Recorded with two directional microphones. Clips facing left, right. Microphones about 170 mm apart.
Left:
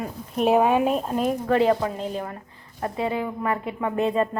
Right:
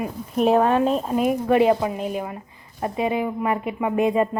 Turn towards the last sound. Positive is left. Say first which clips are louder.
# right 3 dB
turn(degrees=-15)  # may be behind; listen again after turning